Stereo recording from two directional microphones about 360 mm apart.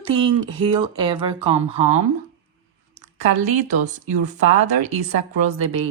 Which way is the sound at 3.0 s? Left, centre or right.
Centre.